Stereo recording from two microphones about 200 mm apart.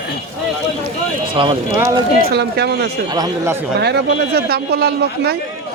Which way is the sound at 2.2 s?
50° right (ahead or behind).